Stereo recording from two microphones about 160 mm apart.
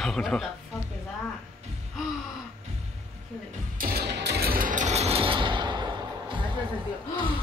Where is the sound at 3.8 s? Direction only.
80° right; by 6.4 s 30° right (ahead or behind).